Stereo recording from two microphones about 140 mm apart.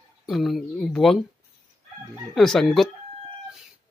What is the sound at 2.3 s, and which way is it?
Speech, centre (ahead or behind).